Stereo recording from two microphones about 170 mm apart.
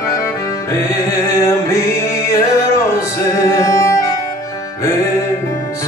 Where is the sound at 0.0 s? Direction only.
20° left (ahead or behind).